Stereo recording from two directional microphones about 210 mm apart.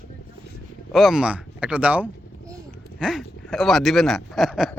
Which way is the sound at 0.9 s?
Centre (ahead or behind).